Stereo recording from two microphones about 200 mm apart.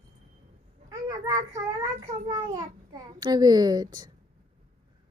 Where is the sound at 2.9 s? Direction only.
20° right (ahead or behind).